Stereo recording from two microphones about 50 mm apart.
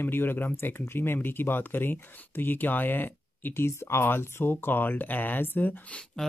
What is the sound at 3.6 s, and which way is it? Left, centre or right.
Speech, left.